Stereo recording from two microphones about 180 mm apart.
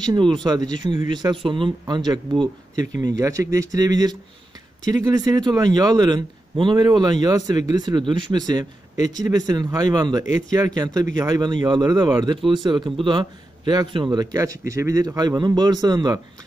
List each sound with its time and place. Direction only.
0.0 s a man's voice: 25° right (ahead or behind)
8.9 s speech: 40° left (ahead or behind)
9.2 s a man's voice: 20° right (ahead or behind)